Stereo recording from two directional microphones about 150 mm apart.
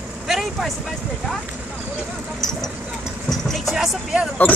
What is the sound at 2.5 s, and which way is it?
Vehicle, 5° left (ahead or behind).